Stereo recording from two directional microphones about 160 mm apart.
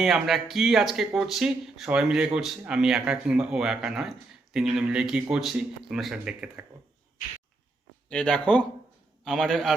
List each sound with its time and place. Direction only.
0.0 s speech: centre (ahead or behind)
8.1 s speech: 5° left (ahead or behind)